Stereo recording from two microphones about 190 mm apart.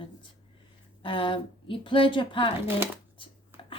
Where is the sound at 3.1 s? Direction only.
25° left (ahead or behind).